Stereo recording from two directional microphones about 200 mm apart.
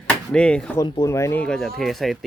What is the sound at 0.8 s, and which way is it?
Speech, 15° left (ahead or behind).